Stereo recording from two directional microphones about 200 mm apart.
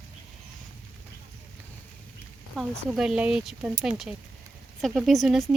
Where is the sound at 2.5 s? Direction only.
Centre (ahead or behind).